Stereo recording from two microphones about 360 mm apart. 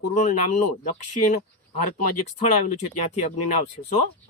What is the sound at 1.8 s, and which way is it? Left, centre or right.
Speech, left.